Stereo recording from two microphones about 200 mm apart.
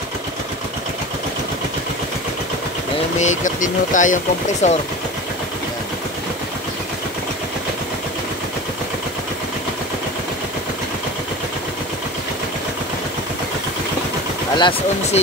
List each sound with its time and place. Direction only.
3.2 s speech: 40° left (ahead or behind)
14.6 s speech: 25° left (ahead or behind)